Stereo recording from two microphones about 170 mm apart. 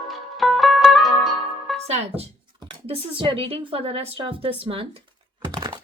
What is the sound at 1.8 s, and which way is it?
Speech, 40° right (ahead or behind).